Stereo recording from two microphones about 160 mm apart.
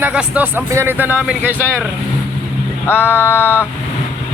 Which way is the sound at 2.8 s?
15° left (ahead or behind).